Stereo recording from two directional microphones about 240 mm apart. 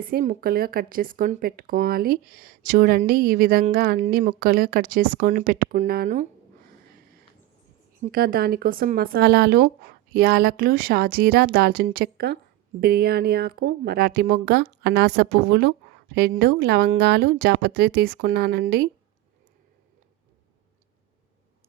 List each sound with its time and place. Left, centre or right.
0.0 s speech: right
8.0 s speech: right